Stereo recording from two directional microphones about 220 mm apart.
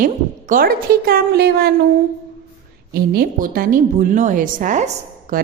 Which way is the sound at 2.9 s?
45° right (ahead or behind).